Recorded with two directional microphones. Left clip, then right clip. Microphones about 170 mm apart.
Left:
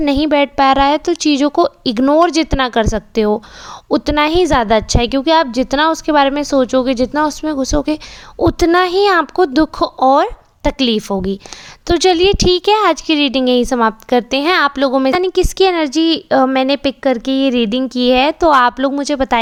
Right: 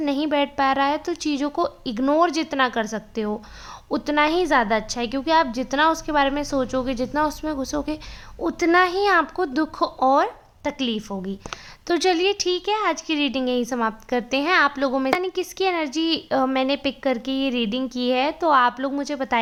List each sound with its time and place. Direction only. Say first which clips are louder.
0.0 s a woman's voice: left 9 dB; 45° left (ahead or behind)